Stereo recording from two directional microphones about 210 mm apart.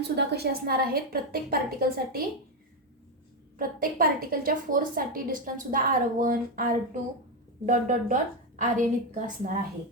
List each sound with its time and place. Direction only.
0.2 s a woman's voice: 50° right (ahead or behind)
3.6 s a woman's voice: 45° right (ahead or behind)